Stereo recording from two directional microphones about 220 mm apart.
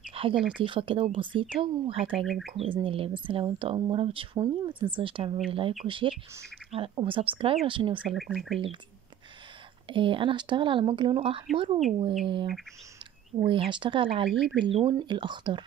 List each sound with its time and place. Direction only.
0.1 s a sound: 25° right (ahead or behind)
0.4 s speech: 5° right (ahead or behind)
0.7 s speech: 25° right (ahead or behind)
2.1 s speech: centre (ahead or behind)
2.6 s speech: 25° right (ahead or behind)
8.0 s speech: centre (ahead or behind)
9.8 s speech: 20° right (ahead or behind)
13.5 s speech: 20° right (ahead or behind)